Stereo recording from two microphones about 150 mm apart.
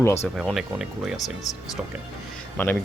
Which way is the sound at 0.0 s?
20° left (ahead or behind).